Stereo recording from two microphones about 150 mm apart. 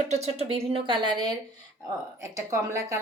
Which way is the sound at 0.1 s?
45° right (ahead or behind).